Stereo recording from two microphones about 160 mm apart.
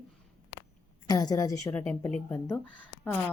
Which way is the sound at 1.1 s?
25° left (ahead or behind).